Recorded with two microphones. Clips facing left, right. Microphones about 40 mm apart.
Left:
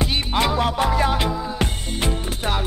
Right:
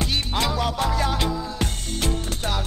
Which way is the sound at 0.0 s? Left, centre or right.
Centre.